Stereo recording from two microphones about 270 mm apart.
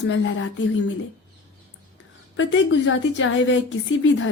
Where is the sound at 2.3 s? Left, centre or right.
Left.